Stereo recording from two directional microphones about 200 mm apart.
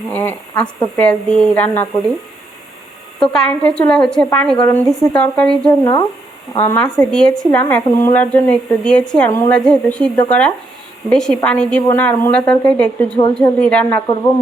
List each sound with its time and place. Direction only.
0.1 s a woman's voice: 10° left (ahead or behind)
3.2 s a woman's voice: 5° left (ahead or behind)
5.8 s a woman's voice: 20° left (ahead or behind)